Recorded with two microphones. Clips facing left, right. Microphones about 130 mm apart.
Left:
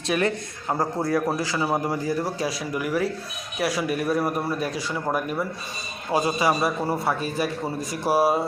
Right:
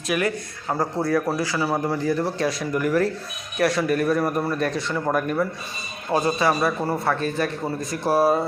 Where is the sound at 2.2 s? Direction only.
5° left (ahead or behind).